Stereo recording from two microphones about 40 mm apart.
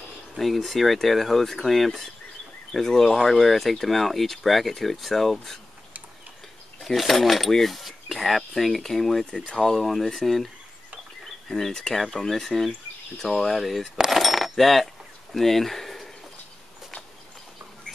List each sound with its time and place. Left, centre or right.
0.4 s speech: centre
6.8 s speech: centre
11.7 s speech: centre
13.2 s speech: left
13.5 s speech: centre
14.1 s keys jangling: centre
15.3 s speech: centre